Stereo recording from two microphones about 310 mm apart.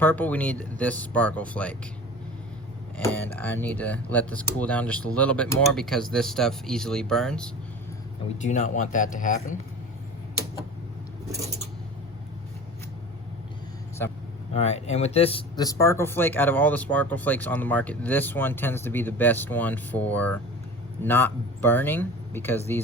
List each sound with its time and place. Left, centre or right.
0.0 s speech: centre
3.0 s speech: centre
8.4 s speech: left
14.5 s speech: centre